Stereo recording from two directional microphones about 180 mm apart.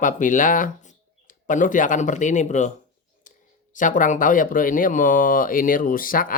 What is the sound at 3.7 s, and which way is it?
Speech, 45° left (ahead or behind).